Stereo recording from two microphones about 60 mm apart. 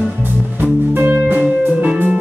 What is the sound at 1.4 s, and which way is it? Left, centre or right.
Music, right.